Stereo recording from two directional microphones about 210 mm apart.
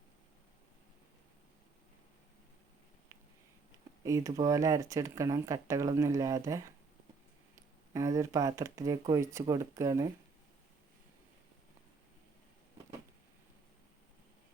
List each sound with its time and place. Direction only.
4.0 s speech: 15° right (ahead or behind)
7.9 s speech: 15° right (ahead or behind)